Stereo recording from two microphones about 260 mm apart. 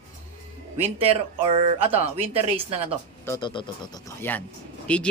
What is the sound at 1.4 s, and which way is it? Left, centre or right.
Speech, right.